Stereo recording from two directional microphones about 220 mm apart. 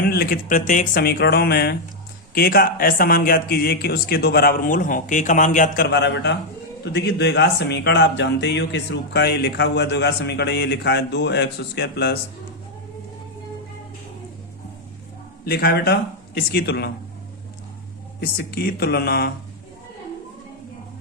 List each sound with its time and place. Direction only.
0.0 s speech: 45° left (ahead or behind)
15.4 s speech: 45° left (ahead or behind)
18.2 s speech: 45° left (ahead or behind)